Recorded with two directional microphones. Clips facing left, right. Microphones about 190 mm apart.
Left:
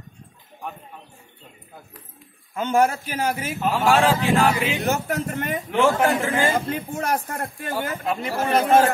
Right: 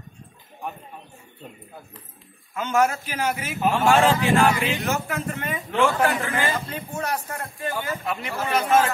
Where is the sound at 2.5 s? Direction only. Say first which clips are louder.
Left 2 dB; 30° left (ahead or behind).